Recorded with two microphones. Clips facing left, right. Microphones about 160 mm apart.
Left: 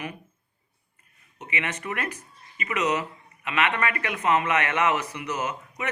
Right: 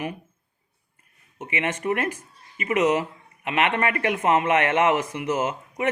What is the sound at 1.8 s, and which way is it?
Speech, 45° right (ahead or behind).